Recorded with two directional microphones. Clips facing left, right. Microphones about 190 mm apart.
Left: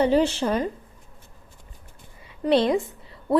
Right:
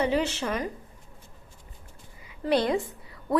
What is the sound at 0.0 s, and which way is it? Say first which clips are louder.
Speech: left 6 dB; 30° left (ahead or behind).